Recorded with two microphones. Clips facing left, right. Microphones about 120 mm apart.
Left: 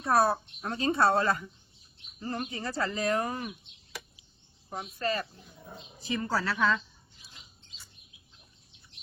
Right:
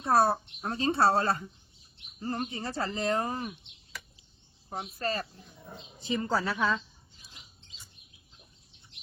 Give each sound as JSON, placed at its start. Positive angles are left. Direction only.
{"t": 0.0, "sound": "speech", "side_deg": -25}
{"t": 4.7, "sound": "speech", "side_deg": -30}
{"t": 5.4, "sound": "speech", "side_deg": 0}
{"t": 5.8, "sound": "speech", "side_deg": -25}